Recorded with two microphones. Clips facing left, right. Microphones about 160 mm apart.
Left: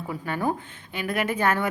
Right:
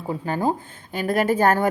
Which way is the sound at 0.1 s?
30° right (ahead or behind).